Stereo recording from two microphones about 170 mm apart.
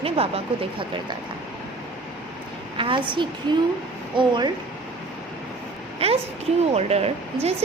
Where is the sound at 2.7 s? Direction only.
30° right (ahead or behind).